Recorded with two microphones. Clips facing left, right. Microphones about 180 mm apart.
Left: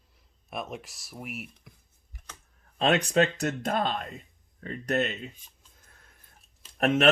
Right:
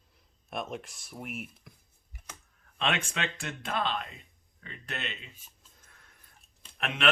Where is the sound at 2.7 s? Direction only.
40° left (ahead or behind).